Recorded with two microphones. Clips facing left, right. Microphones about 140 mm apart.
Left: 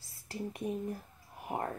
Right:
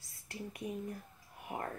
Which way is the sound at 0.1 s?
30° left (ahead or behind).